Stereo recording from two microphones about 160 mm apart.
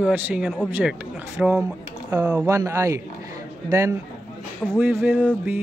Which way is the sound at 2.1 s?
20° right (ahead or behind).